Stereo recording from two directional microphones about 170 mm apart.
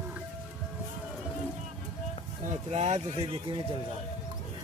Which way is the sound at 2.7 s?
40° right (ahead or behind).